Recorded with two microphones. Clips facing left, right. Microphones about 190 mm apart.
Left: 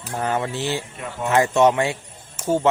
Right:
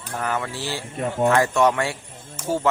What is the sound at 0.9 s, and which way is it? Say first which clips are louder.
Speech: right 7 dB; 45° right (ahead or behind).